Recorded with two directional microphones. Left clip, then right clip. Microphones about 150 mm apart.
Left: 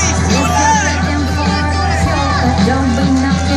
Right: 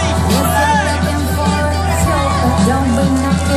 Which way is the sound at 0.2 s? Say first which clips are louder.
Left 1 dB; 35° right (ahead or behind).